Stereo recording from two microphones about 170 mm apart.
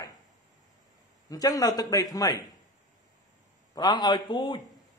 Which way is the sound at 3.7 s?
25° left (ahead or behind).